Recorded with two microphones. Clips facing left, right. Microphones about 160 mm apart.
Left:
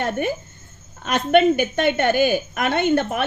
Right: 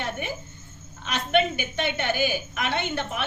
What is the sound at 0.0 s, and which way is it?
A woman's voice, 50° left (ahead or behind).